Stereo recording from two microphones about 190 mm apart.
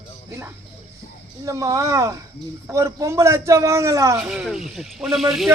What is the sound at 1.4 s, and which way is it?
A man's voice, 15° right (ahead or behind).